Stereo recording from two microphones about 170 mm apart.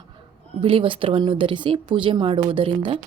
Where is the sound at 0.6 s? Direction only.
30° right (ahead or behind).